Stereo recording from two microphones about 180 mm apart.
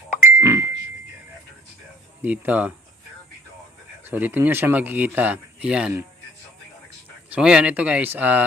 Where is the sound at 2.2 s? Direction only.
10° right (ahead or behind).